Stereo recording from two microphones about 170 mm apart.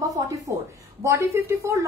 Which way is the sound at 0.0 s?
20° right (ahead or behind).